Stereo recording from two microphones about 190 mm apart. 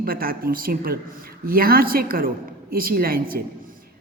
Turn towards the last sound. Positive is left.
turn(degrees=-50)  # may be behind; listen again after turning